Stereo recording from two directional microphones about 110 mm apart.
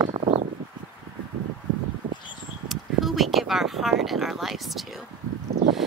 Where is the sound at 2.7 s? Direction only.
Centre (ahead or behind).